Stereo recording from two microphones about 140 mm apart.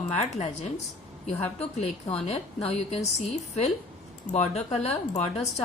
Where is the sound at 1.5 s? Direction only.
45° left (ahead or behind).